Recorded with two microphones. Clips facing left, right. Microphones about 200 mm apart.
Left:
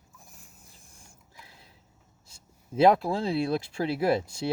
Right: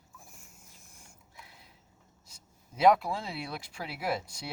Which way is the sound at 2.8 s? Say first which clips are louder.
Left 3 dB; 30° left (ahead or behind).